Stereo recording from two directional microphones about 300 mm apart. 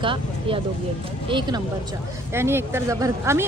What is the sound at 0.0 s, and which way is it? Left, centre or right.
Speech, centre.